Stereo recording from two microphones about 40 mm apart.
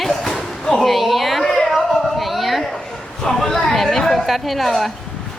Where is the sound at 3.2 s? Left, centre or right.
Centre.